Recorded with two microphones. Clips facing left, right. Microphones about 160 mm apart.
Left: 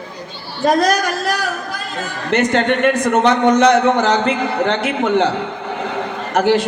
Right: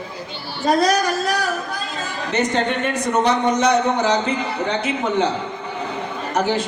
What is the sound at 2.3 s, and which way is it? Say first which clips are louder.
A man's voice: left 5 dB; 70° left (ahead or behind).